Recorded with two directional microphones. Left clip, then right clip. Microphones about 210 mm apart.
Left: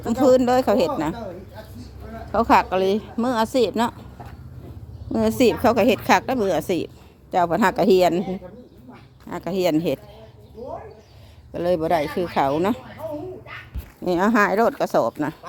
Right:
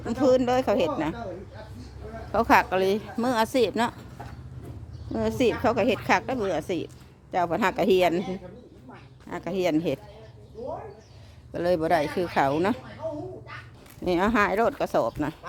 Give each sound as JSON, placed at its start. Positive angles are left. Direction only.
{"t": 0.1, "sound": "speech", "side_deg": 20}
{"t": 2.3, "sound": "speech", "side_deg": 10}
{"t": 5.1, "sound": "a woman's voice", "side_deg": 25}
{"t": 9.3, "sound": "speech", "side_deg": 15}
{"t": 11.5, "sound": "speech", "side_deg": 5}
{"t": 14.0, "sound": "speech", "side_deg": 5}